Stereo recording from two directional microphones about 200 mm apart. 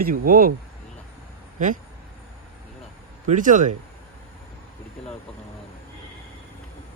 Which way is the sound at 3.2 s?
40° right (ahead or behind).